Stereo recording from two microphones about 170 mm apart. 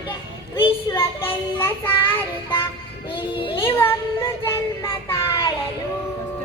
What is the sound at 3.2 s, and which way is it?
Speech, 30° left (ahead or behind).